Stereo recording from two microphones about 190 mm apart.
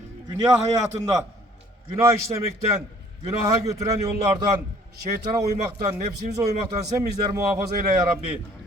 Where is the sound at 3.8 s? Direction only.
15° right (ahead or behind).